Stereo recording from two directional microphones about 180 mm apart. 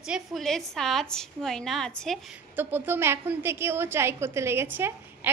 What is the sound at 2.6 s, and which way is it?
A woman's voice, 10° right (ahead or behind).